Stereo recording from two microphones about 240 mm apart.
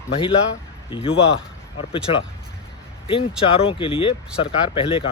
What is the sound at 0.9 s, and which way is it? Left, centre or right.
Speech, left.